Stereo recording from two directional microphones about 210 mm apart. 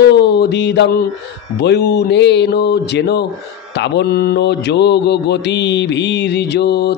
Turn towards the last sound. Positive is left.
turn(degrees=55)  # may be behind; listen again after turning